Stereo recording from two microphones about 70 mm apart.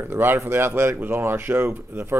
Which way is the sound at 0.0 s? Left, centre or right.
Right.